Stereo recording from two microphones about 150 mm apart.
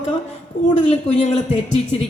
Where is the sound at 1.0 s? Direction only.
50° left (ahead or behind).